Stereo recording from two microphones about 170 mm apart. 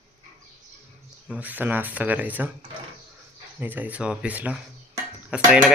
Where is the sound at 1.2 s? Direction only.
10° right (ahead or behind).